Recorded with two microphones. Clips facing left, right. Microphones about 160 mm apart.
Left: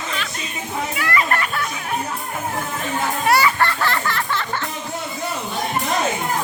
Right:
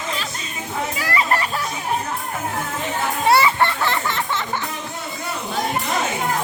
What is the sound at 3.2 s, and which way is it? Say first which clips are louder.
Music: right 2 dB; 25° right (ahead or behind).